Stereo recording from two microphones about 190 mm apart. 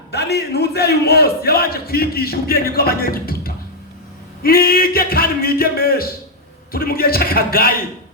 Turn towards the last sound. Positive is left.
turn(degrees=50)  # may be behind; listen again after turning